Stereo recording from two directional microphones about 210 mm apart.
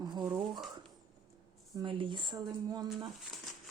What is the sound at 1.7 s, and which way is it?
Speech, 20° right (ahead or behind).